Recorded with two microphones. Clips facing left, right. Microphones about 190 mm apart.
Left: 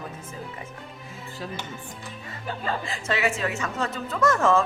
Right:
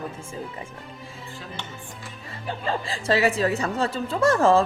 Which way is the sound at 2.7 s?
30° right (ahead or behind).